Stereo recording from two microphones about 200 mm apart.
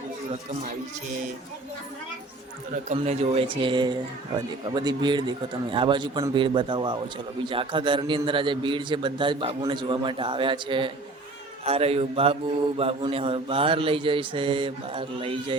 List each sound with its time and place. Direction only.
2.9 s mantra: 30° right (ahead or behind)